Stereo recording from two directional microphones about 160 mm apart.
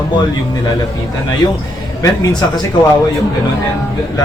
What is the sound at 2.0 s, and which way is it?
Speech, 25° left (ahead or behind).